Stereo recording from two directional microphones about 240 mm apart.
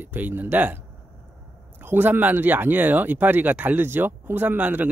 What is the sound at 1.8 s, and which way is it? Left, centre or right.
Speech, centre.